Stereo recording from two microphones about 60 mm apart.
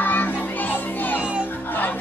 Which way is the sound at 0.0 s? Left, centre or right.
Left.